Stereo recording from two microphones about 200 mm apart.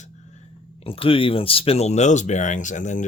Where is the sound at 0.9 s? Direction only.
25° left (ahead or behind).